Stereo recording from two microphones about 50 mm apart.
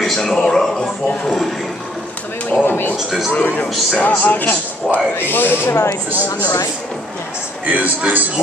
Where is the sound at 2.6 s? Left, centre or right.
Left.